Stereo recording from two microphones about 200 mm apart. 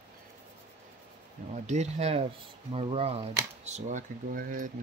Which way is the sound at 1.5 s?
35° right (ahead or behind).